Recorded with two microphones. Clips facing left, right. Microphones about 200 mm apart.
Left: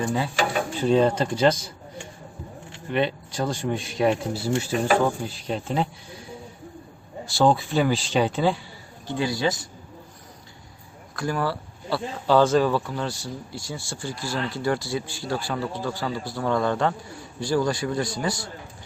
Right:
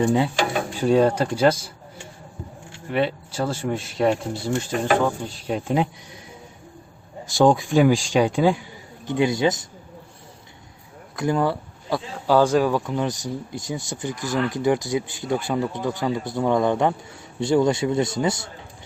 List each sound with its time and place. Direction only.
0.0 s speech: 20° right (ahead or behind)
0.8 s speech: 10° right (ahead or behind)
2.9 s a man's voice: 5° right (ahead or behind)
5.5 s speech: 10° right (ahead or behind)
7.3 s speech: 15° right (ahead or behind)
11.2 s speech: 20° right (ahead or behind)